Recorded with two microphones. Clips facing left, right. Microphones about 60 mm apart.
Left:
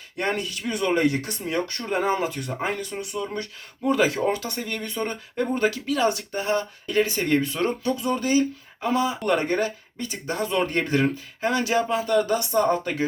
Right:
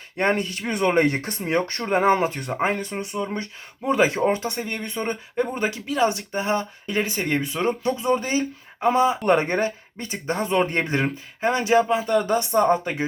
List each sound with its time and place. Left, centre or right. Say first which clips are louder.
0.2 s speech: right 4 dB; right